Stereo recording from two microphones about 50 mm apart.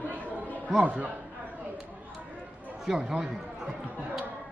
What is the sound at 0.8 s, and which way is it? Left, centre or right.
Speech, right.